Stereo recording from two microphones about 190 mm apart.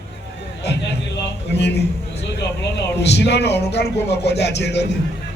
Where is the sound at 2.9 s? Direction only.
60° left (ahead or behind).